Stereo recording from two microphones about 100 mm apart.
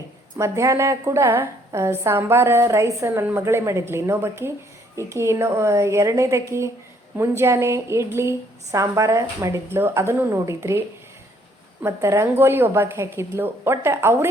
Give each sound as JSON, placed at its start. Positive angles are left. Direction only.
{"t": 0.3, "sound": "a woman's voice", "side_deg": -30}